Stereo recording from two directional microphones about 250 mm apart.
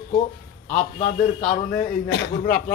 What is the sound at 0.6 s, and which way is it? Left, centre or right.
A man's voice, left.